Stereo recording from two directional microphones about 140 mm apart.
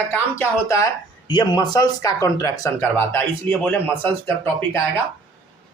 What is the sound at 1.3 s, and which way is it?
Speech, 30° left (ahead or behind).